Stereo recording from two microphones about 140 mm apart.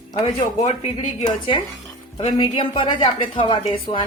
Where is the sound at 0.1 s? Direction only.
45° left (ahead or behind).